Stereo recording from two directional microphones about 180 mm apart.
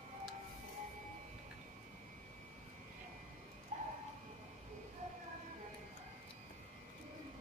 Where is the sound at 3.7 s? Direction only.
40° right (ahead or behind).